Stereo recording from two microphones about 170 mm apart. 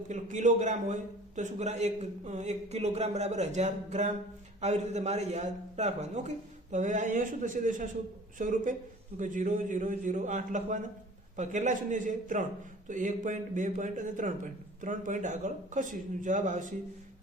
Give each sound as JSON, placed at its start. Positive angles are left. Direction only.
{"t": 0.1, "sound": "a man's voice", "side_deg": -45}